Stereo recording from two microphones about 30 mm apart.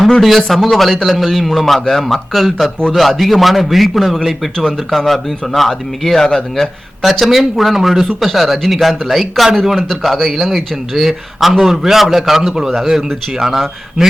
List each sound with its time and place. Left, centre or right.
0.2 s a man's voice: centre
6.1 s speech: centre
7.0 s a man's voice: centre